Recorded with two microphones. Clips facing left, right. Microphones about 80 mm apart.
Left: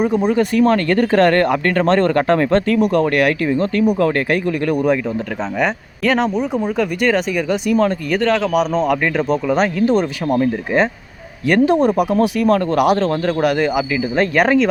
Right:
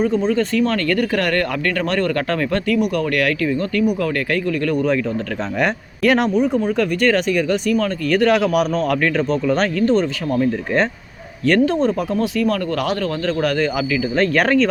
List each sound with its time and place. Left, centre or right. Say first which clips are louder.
0.3 s speech: left 4 dB; centre
5.5 s speech: even; centre
7.7 s speech: left 8 dB; left
8.2 s a man's voice: even; centre
8.8 s speech: left 1 dB; centre